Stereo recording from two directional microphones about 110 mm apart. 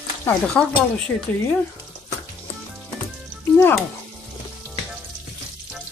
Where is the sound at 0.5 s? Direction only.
10° left (ahead or behind).